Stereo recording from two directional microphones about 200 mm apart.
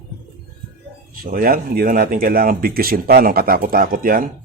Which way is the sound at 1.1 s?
45° right (ahead or behind).